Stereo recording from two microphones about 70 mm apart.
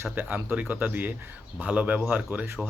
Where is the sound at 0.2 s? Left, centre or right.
Right.